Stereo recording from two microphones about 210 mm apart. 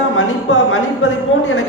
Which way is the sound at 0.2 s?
70° left (ahead or behind).